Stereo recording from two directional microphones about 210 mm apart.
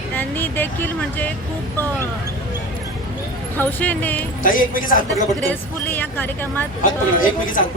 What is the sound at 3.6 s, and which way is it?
Speech, 10° left (ahead or behind).